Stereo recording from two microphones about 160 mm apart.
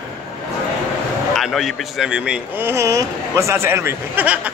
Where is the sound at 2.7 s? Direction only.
20° right (ahead or behind).